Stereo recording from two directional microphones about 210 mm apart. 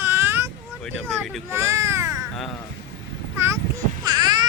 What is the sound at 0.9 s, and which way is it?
Vehicle, 5° left (ahead or behind).